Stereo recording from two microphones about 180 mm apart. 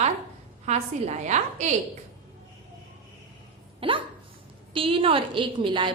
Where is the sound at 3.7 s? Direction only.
30° right (ahead or behind).